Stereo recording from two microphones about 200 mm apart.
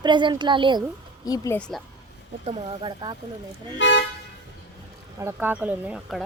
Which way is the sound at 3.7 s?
65° left (ahead or behind).